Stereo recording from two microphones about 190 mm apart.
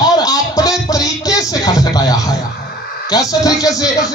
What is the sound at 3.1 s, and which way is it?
Speech, 20° left (ahead or behind).